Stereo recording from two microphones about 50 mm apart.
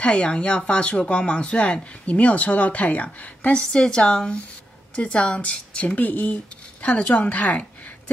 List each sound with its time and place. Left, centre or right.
0.0 s speech: left
3.7 s speech: centre